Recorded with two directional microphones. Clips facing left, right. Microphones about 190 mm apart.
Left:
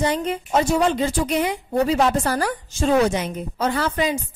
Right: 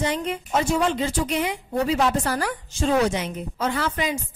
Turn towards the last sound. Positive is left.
turn(degrees=35)  # may be behind; listen again after turning